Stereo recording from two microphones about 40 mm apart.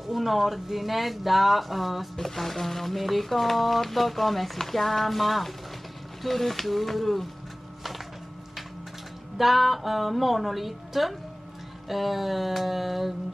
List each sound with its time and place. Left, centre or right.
0.1 s speech: centre
9.4 s speech: centre